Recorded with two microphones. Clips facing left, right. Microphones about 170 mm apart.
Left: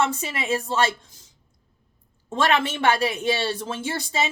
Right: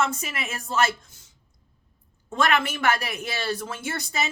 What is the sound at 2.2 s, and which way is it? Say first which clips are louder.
Speech: left 2 dB; 30° left (ahead or behind).